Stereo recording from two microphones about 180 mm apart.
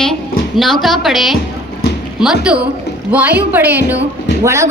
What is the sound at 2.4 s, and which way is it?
A woman's voice, 5° right (ahead or behind).